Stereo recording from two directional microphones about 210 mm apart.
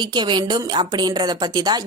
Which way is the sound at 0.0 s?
20° right (ahead or behind).